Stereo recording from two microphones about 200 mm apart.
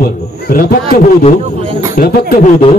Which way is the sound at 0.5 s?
45° left (ahead or behind).